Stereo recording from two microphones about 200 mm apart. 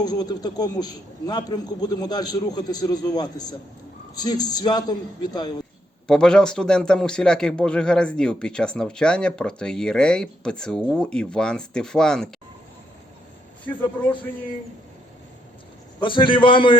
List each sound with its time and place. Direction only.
0.0 s a man's voice: 20° left (ahead or behind)
6.1 s speech: 5° left (ahead or behind)
16.0 s a man's voice: 25° left (ahead or behind)